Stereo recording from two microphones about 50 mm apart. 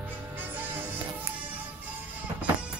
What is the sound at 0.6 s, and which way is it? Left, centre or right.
Music, right.